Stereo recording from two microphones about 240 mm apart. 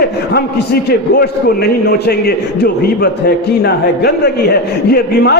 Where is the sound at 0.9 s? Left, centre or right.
Left.